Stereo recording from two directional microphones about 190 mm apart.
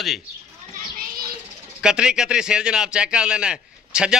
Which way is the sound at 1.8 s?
5° right (ahead or behind).